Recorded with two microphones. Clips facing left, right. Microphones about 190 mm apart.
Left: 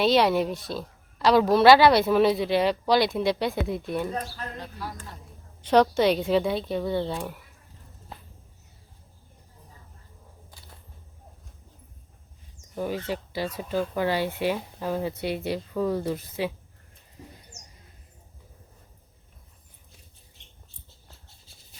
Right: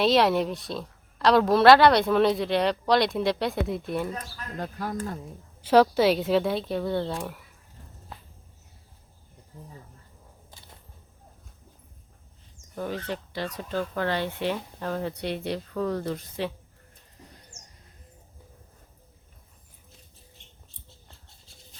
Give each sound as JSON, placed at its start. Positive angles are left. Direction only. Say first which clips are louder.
{"t": 0.0, "sound": "a woman's voice", "louder": "even", "side_deg": 0}
{"t": 4.5, "sound": "speech", "louder": "right 6 dB", "side_deg": -50}
{"t": 5.6, "sound": "a woman's voice", "louder": "right 1 dB", "side_deg": -5}
{"t": 12.7, "sound": "speech", "louder": "left 2 dB", "side_deg": 10}